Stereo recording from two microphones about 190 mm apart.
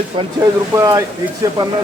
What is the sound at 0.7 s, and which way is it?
Speech, 15° right (ahead or behind).